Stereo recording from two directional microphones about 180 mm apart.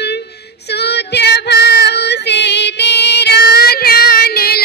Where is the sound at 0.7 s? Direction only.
65° left (ahead or behind).